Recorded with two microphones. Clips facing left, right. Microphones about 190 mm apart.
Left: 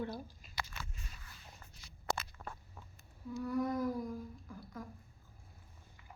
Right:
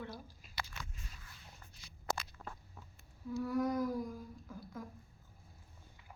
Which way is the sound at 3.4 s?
Centre (ahead or behind).